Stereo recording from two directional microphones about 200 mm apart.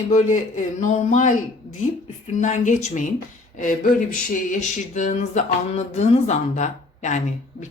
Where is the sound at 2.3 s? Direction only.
40° left (ahead or behind).